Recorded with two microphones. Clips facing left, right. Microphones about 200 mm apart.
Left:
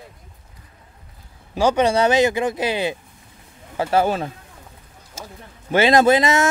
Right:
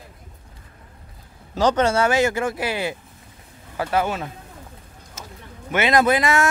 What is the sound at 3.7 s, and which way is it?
Speech, 30° left (ahead or behind).